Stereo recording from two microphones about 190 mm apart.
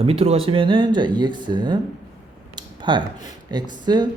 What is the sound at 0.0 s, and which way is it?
Speech, 30° right (ahead or behind).